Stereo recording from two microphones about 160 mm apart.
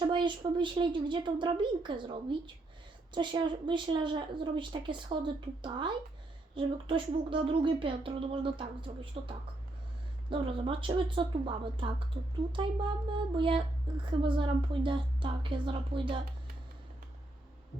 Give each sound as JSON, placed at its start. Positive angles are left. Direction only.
{"t": 0.1, "sound": "a woman's voice", "side_deg": -30}
{"t": 3.2, "sound": "a woman's voice", "side_deg": -30}